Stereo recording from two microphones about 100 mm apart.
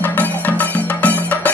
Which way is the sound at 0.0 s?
20° left (ahead or behind).